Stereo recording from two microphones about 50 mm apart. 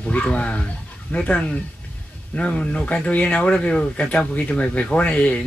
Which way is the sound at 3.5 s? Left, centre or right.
Left.